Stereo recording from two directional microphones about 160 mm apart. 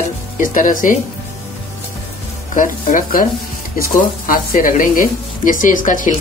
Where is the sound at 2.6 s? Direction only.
55° left (ahead or behind).